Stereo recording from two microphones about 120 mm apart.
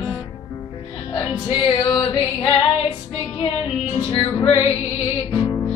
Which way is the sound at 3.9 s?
55° left (ahead or behind).